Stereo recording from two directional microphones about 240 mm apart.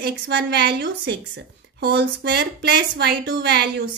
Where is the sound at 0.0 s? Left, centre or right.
Right.